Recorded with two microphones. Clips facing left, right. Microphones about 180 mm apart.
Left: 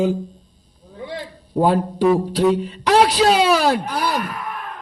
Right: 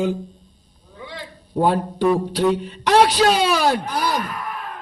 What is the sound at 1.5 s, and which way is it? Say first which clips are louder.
Speech: left 2 dB; 5° left (ahead or behind).